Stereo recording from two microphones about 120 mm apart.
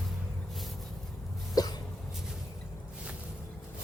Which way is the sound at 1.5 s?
35° left (ahead or behind).